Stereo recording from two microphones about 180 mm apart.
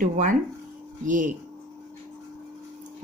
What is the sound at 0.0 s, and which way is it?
A woman's voice, 50° right (ahead or behind).